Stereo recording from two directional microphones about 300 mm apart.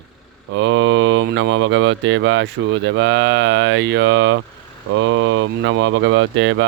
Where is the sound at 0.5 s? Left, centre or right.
Right.